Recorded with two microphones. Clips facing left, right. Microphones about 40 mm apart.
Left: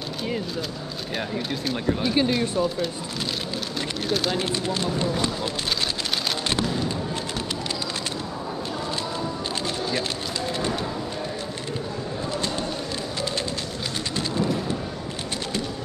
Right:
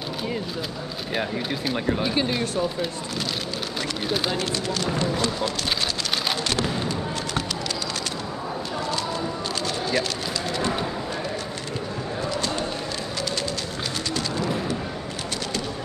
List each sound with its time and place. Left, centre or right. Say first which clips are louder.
1.1 s speech: right 2 dB; centre
4.4 s speech: left 1 dB; left